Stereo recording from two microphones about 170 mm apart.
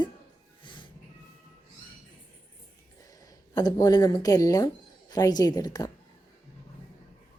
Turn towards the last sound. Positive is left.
turn(degrees=20)  # may be behind; listen again after turning